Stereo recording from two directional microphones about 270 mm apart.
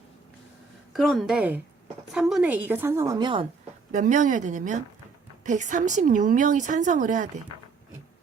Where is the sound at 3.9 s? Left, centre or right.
Right.